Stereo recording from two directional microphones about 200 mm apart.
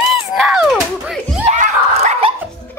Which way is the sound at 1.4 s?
35° right (ahead or behind).